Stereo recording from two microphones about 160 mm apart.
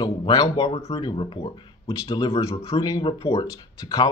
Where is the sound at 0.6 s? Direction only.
40° left (ahead or behind).